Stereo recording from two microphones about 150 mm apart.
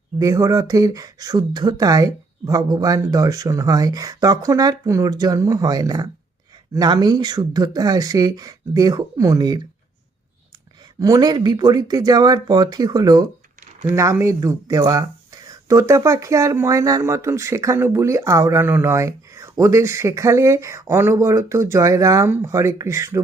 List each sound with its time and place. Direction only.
0.2 s speech: 20° right (ahead or behind)
11.0 s speech: 25° right (ahead or behind)